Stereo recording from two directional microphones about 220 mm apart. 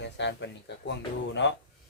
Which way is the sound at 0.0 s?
50° left (ahead or behind).